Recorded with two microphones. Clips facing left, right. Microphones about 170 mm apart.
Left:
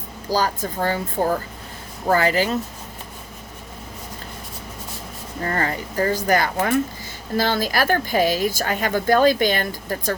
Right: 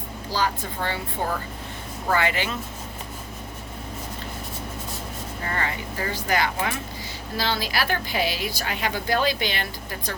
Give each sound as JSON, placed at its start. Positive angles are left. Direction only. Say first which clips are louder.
{"t": 0.3, "sound": "a woman's voice", "louder": "left 5 dB", "side_deg": 40}
{"t": 5.4, "sound": "speech", "louder": "left 6 dB", "side_deg": 40}